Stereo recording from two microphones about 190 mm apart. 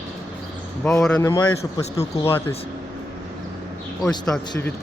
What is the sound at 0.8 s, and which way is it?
Speech, 5° left (ahead or behind).